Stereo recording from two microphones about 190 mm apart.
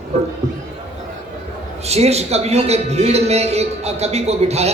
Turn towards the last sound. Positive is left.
turn(degrees=-35)  # may be behind; listen again after turning